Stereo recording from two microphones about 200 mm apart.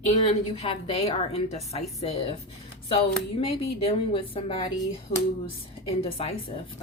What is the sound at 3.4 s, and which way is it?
Speech, 30° left (ahead or behind).